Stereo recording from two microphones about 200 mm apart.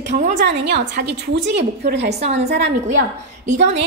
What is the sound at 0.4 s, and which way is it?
A woman's voice, 60° right (ahead or behind).